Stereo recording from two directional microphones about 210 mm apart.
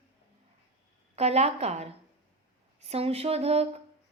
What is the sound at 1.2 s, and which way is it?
Speech, 30° right (ahead or behind).